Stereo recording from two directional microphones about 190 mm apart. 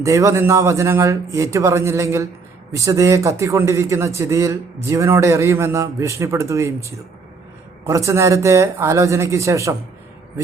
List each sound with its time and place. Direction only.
0.0 s a man's voice: 15° right (ahead or behind)
7.9 s a man's voice: 15° right (ahead or behind)